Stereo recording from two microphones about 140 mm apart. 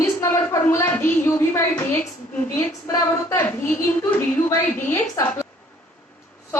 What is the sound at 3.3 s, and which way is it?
A woman's voice, 15° left (ahead or behind).